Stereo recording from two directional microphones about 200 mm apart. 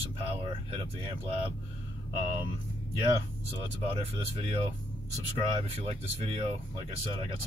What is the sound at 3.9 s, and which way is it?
Speech, 30° right (ahead or behind).